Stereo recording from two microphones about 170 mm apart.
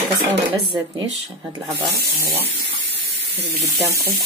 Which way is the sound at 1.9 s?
70° right (ahead or behind).